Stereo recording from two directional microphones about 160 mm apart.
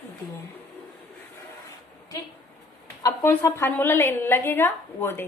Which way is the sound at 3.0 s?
20° left (ahead or behind).